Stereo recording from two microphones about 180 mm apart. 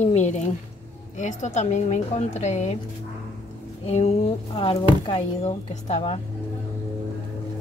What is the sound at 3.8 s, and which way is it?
Speech, 35° left (ahead or behind).